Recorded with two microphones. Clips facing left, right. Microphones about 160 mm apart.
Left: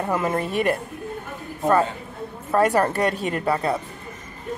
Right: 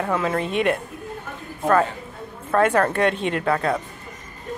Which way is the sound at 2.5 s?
10° left (ahead or behind).